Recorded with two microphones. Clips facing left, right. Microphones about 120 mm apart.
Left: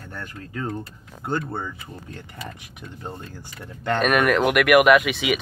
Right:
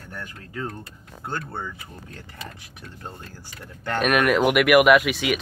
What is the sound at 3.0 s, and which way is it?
Speech, 20° left (ahead or behind).